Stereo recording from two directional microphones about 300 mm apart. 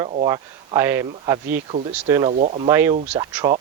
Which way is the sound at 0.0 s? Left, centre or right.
Right.